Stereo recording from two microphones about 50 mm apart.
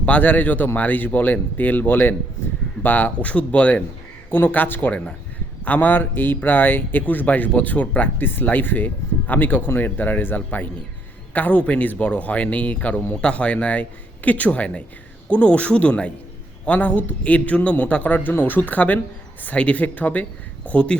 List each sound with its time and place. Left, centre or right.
0.0 s speech: left
2.4 s a sound: left
2.8 s speech: left
20.7 s speech: left